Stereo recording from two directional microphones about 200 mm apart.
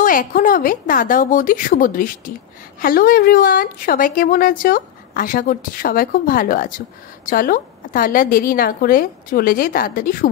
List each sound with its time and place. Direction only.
0.0 s a woman's voice: 45° left (ahead or behind)